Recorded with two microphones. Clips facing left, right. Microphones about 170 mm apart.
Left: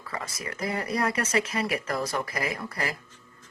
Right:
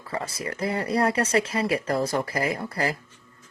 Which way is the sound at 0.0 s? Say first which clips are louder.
Right 5 dB; 30° right (ahead or behind).